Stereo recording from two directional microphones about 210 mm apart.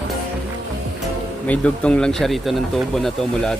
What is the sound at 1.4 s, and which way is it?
Speech, 5° left (ahead or behind).